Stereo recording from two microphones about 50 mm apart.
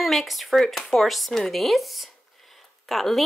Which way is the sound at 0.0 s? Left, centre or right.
Centre.